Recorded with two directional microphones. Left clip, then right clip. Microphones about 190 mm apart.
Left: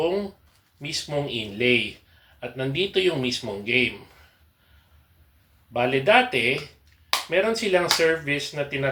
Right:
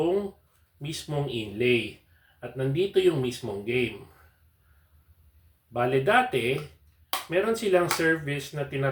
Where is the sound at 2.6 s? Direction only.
15° right (ahead or behind).